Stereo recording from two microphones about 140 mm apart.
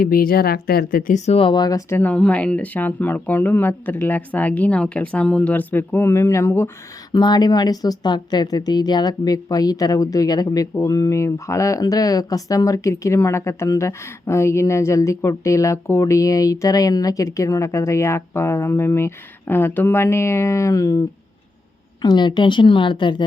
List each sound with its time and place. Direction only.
0.0 s speech: 90° left; by 1.8 s 30° left (ahead or behind)
1.9 s speech: 15° left (ahead or behind)
7.1 s speech: 30° left (ahead or behind)
22.0 s a woman's voice: 30° left (ahead or behind)